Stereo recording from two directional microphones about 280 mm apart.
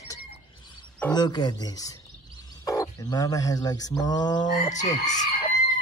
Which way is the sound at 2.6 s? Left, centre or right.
Centre.